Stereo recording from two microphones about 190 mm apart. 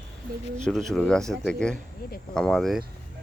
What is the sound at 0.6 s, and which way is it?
Speech, centre (ahead or behind).